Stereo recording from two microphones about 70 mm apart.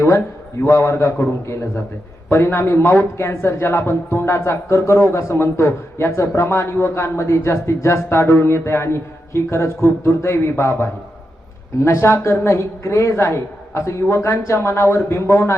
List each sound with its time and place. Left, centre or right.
0.6 s speech: left